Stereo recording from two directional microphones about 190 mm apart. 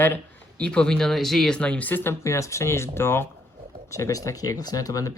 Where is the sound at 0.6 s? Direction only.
5° left (ahead or behind).